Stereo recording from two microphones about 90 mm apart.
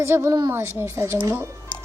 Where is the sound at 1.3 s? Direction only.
20° right (ahead or behind).